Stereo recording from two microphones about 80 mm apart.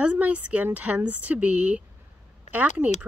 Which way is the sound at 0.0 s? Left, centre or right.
Centre.